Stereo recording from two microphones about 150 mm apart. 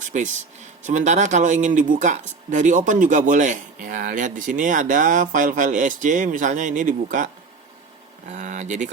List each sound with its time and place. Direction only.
0.1 s speech: 55° right (ahead or behind)
8.3 s speech: 55° right (ahead or behind)